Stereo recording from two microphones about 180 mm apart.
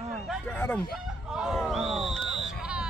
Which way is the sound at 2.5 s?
5° right (ahead or behind).